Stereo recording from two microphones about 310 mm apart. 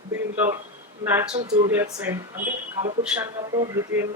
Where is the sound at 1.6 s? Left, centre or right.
Centre.